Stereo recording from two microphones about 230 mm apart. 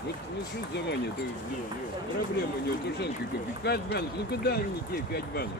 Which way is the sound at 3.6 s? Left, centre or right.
Left.